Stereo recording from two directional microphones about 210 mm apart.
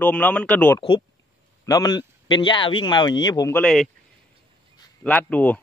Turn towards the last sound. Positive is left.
turn(degrees=5)  # may be behind; listen again after turning